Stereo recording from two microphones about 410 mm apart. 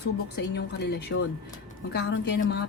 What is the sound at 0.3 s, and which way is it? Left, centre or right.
Speech, left.